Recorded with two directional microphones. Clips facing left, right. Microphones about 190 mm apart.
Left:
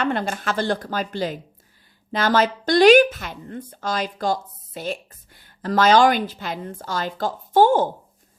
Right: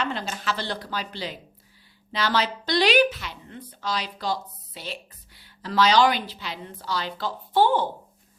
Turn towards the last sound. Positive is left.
turn(degrees=45)  # may be behind; listen again after turning